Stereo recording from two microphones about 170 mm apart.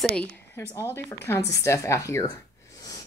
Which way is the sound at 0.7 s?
15° left (ahead or behind).